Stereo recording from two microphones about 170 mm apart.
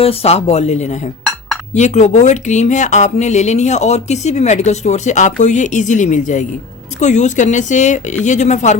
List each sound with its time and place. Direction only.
0.0 s speech: 35° left (ahead or behind)